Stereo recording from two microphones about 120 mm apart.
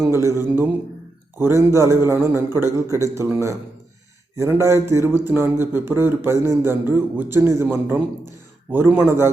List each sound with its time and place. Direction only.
0.0 s a man's voice: 25° right (ahead or behind)